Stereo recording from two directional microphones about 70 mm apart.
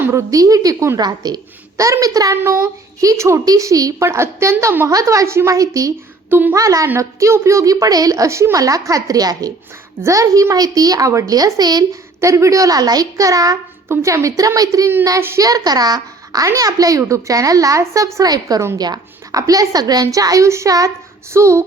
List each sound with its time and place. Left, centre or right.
0.1 s a woman's voice: right
0.9 s a woman's voice: right
1.8 s a woman's voice: right
2.3 s a woman's voice: right
3.0 s a woman's voice: right
3.4 s a woman's voice: right
4.0 s a woman's voice: right
4.9 s a woman's voice: right
12.2 s a woman's voice: right
14.0 s a woman's voice: right
16.5 s a woman's voice: right
18.2 s a woman's voice: right
21.3 s a woman's voice: right